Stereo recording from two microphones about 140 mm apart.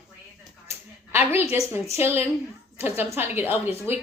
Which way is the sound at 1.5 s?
20° right (ahead or behind).